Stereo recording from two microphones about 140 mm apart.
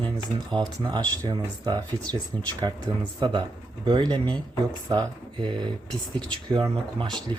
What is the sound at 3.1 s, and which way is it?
Speech, 30° right (ahead or behind).